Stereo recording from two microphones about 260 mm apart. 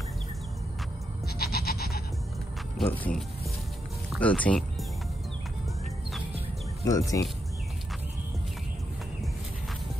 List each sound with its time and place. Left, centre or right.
1.2 s goat: left
2.9 s speech: centre
6.8 s speech: centre